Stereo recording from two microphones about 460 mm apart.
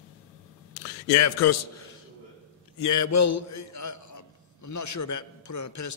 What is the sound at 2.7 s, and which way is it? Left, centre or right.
A man's voice, left.